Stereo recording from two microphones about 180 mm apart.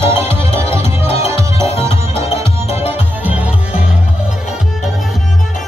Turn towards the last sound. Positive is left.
turn(degrees=-10)  # may be behind; listen again after turning